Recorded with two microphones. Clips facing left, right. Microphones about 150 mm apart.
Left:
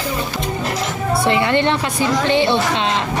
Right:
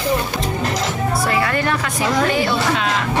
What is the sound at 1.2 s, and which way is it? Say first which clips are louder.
A woman's voice: left 5 dB; 25° left (ahead or behind).